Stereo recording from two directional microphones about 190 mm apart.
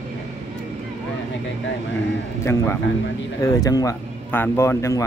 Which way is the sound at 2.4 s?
15° left (ahead or behind).